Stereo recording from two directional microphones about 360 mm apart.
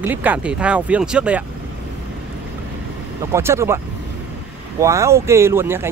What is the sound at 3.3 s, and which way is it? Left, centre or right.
Speech, centre.